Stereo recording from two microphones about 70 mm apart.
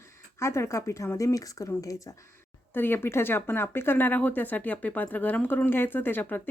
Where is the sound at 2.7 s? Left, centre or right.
Left.